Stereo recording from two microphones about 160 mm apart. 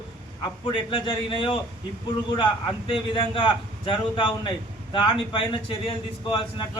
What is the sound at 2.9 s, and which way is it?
A man's voice, 30° left (ahead or behind).